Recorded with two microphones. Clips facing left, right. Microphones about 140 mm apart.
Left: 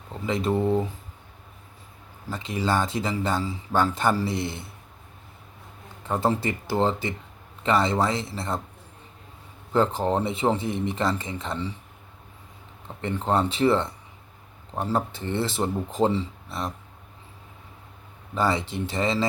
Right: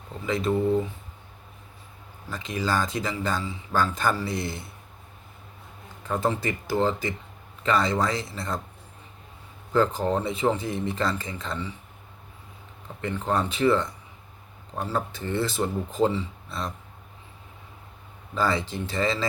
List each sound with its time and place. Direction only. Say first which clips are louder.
0.3 s speech: even; 25° left (ahead or behind)
2.3 s speech: left 2 dB; 25° left (ahead or behind)
3.4 s speech: left 3 dB; 35° left (ahead or behind)
3.8 s speech: left 2 dB; 25° left (ahead or behind)
6.0 s speech: left 2 dB; 25° left (ahead or behind)
9.7 s speech: left 1 dB; 25° left (ahead or behind)
13.0 s speech: left 2 dB; 25° left (ahead or behind)
14.9 s speech: even; 25° left (ahead or behind)
18.3 s speech: left 1 dB; 20° left (ahead or behind)